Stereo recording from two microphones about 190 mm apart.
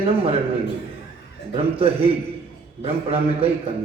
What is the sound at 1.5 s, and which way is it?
A man's voice, 30° right (ahead or behind).